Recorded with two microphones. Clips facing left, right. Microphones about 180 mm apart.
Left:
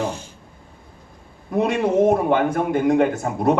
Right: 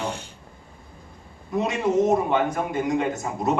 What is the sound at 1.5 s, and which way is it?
A man's voice, 55° left (ahead or behind).